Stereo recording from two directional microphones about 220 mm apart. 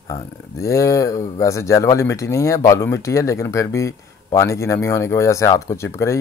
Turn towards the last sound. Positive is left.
turn(degrees=10)  # may be behind; listen again after turning